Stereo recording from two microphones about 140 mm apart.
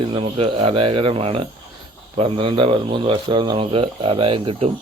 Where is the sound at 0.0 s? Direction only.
40° right (ahead or behind).